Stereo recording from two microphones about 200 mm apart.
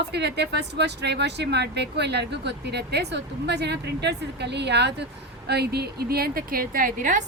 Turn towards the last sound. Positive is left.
turn(degrees=-40)  # may be behind; listen again after turning